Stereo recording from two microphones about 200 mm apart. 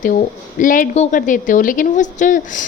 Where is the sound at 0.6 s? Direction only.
40° left (ahead or behind).